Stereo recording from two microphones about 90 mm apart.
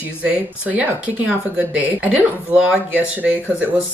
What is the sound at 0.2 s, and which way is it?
Speech, 15° right (ahead or behind).